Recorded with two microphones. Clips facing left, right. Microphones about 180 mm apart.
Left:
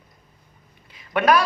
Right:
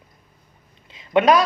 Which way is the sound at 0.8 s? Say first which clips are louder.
Right 3 dB; 25° right (ahead or behind).